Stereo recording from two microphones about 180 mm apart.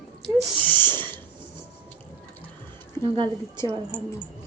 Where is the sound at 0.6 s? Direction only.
10° left (ahead or behind).